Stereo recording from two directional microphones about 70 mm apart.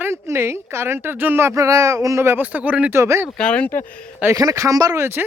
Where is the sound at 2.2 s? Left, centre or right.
Right.